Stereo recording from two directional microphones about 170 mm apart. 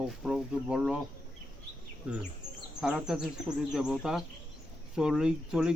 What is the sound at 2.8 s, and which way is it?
Speech, 5° right (ahead or behind).